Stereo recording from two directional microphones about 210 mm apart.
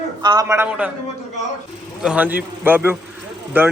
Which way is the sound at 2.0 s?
5° right (ahead or behind).